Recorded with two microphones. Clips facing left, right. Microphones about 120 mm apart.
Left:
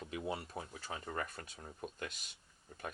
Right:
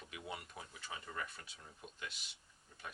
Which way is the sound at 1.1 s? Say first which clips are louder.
Left 6 dB; 45° left (ahead or behind).